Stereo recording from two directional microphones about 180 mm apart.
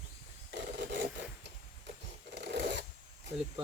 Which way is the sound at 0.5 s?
75° right (ahead or behind).